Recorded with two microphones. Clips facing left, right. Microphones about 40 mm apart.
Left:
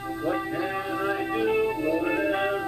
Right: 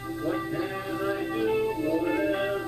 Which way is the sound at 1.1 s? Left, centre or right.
Centre.